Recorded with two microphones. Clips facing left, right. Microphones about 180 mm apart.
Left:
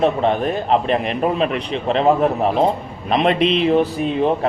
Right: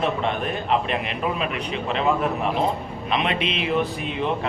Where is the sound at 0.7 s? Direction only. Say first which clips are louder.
Left 5 dB; 40° left (ahead or behind).